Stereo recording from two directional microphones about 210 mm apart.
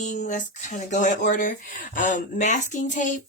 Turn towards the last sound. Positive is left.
turn(degrees=35)  # may be behind; listen again after turning